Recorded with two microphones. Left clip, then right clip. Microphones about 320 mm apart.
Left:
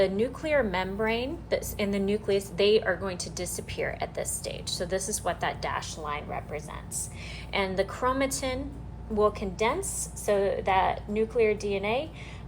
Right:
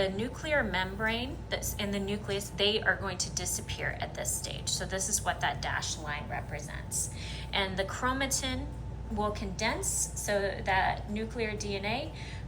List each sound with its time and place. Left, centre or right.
0.0 s a woman's voice: centre